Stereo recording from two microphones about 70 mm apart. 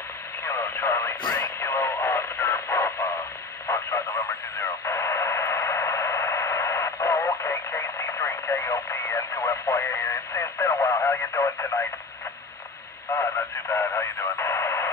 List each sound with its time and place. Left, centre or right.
0.4 s radio: left
13.7 s radio: left